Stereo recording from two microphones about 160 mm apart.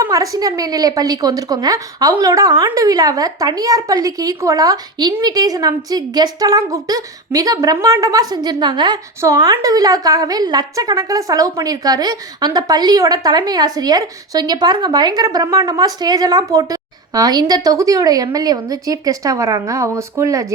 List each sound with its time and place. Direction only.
0.0 s a woman's voice: 20° right (ahead or behind)